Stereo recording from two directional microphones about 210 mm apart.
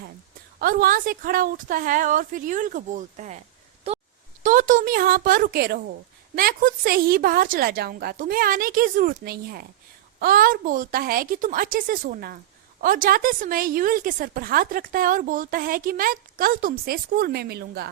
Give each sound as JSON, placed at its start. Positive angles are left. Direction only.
{"t": 0.6, "sound": "a woman's voice", "side_deg": -45}
{"t": 3.9, "sound": "a sound", "side_deg": -30}
{"t": 4.4, "sound": "a woman's voice", "side_deg": -40}